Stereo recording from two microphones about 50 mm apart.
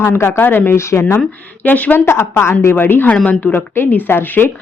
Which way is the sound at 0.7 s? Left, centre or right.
Left.